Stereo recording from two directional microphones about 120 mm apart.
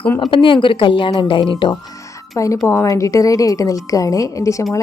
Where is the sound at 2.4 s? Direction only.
25° left (ahead or behind).